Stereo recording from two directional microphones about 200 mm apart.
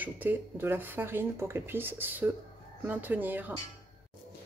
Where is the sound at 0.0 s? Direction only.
10° right (ahead or behind).